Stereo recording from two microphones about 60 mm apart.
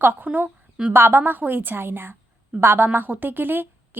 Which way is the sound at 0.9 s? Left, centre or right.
Right.